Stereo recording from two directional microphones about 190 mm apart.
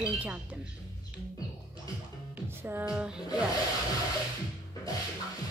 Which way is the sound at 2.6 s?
10° right (ahead or behind).